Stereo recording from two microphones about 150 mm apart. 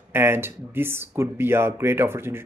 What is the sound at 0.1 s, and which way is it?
Speech, 15° right (ahead or behind).